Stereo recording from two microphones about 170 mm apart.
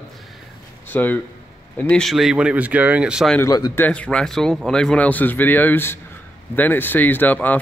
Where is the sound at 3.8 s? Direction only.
5° left (ahead or behind).